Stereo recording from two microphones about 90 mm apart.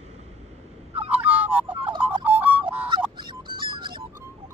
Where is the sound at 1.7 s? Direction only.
70° right (ahead or behind).